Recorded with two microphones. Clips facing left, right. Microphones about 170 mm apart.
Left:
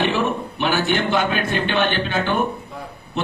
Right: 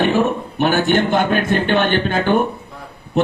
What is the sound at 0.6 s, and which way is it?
A man's voice, 50° right (ahead or behind).